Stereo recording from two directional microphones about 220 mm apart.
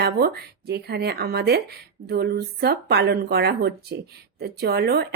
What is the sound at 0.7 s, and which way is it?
Speech, 45° right (ahead or behind).